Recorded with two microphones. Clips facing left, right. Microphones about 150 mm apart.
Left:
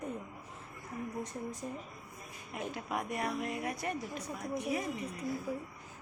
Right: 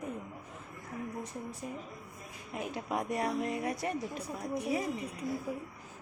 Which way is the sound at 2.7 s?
30° right (ahead or behind).